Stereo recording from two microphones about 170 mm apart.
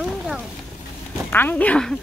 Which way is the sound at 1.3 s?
10° left (ahead or behind).